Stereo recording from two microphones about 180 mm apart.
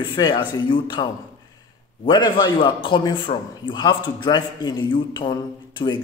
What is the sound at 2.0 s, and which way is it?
A man's voice, 25° left (ahead or behind).